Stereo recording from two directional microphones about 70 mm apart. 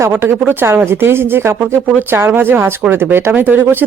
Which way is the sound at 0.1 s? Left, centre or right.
Right.